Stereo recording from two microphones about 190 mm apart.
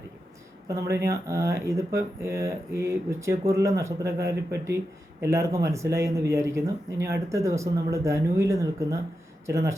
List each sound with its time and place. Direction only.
0.9 s speech: 55° right (ahead or behind)
1.3 s speech: 15° right (ahead or behind)